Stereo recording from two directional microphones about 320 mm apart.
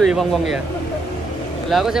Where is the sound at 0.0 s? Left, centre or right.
Centre.